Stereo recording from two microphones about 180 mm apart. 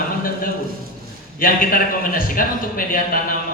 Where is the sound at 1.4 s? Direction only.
50° left (ahead or behind).